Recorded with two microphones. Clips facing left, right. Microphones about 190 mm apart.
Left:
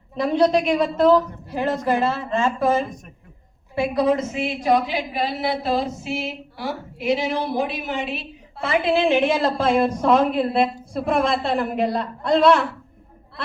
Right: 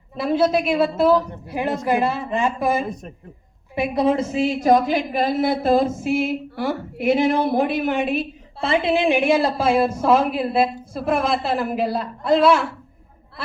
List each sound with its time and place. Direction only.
0.2 s a woman's voice: 5° right (ahead or behind); by 8.3 s 50° right (ahead or behind)
8.6 s a woman's voice: 30° right (ahead or behind)
9.0 s speech: 15° right (ahead or behind)